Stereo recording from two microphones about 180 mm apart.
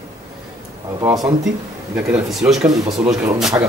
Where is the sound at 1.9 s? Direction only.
5° right (ahead or behind).